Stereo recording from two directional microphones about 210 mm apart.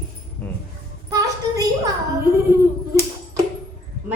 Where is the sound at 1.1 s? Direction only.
15° right (ahead or behind).